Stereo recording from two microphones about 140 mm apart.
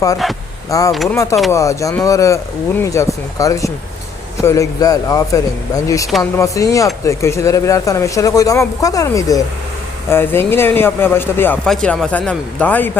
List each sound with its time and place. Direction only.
0.7 s speech: 25° left (ahead or behind)